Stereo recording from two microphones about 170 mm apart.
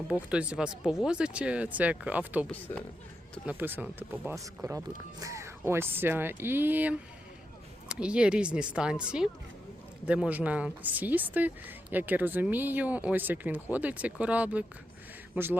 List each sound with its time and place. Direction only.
0.1 s a woman's voice: 5° right (ahead or behind)
2.7 s speech: 10° left (ahead or behind)
3.4 s a woman's voice: 10° right (ahead or behind)